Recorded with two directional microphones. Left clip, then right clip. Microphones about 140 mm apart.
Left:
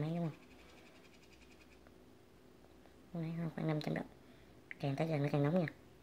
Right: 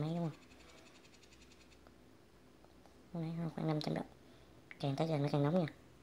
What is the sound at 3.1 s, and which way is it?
A woman's voice, 10° right (ahead or behind).